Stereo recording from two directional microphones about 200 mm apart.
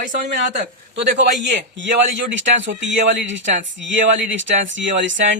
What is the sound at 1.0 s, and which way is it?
A man's voice, 60° right (ahead or behind).